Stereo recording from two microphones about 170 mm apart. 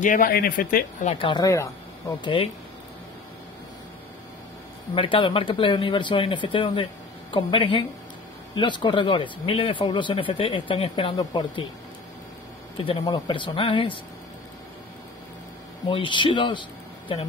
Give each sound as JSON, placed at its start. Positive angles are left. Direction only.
{"t": 0.0, "sound": "speech", "side_deg": 55}
{"t": 1.1, "sound": "speech", "side_deg": 30}
{"t": 2.2, "sound": "speech", "side_deg": 30}
{"t": 4.9, "sound": "speech", "side_deg": 30}
{"t": 12.7, "sound": "speech", "side_deg": 30}
{"t": 15.9, "sound": "speech", "side_deg": 30}